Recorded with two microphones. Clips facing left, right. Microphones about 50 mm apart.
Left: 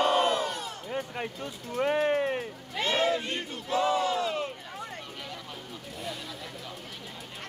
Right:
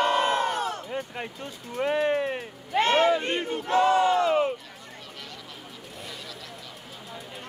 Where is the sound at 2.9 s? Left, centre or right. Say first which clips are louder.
Right 4 dB; centre.